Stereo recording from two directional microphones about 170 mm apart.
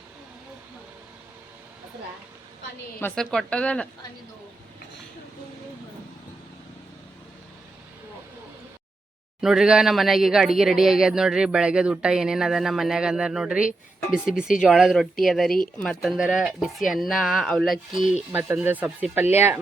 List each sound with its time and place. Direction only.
3.0 s speech: 15° left (ahead or behind)
9.4 s speech: 5° right (ahead or behind)
18.1 s speech: 10° right (ahead or behind)